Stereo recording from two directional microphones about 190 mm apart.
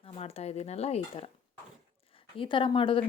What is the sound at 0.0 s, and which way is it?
Speech, 30° left (ahead or behind).